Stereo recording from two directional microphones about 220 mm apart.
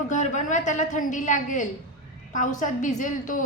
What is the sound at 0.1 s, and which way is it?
A woman's voice, 35° left (ahead or behind).